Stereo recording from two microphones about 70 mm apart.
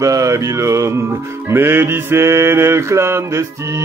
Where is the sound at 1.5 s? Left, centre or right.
Right.